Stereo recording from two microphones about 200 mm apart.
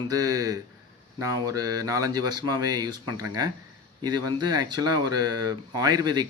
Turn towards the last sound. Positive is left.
turn(degrees=-20)  # may be behind; listen again after turning